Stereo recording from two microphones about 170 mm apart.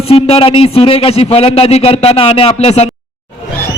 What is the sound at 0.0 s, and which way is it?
A man's voice, 35° left (ahead or behind).